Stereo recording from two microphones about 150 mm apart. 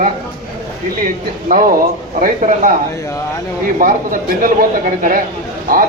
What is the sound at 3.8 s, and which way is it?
Speech, 65° right (ahead or behind).